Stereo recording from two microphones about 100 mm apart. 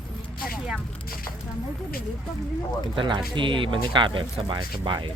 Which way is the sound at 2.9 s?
50° right (ahead or behind).